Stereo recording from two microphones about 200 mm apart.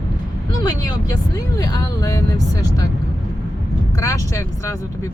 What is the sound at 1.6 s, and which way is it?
Speech, 20° left (ahead or behind).